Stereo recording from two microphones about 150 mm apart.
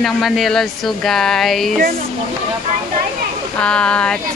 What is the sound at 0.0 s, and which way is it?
Speech, centre (ahead or behind).